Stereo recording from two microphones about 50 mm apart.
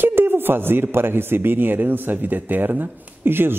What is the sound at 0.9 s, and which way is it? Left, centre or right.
Speech, right.